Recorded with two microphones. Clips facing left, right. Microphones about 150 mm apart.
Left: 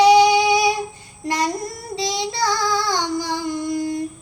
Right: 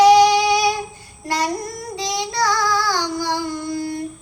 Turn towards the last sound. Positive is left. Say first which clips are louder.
# left 2 dB
turn(degrees=15)  # may be behind; listen again after turning